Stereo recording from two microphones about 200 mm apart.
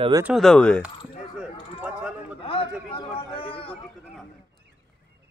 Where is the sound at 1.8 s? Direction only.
5° right (ahead or behind).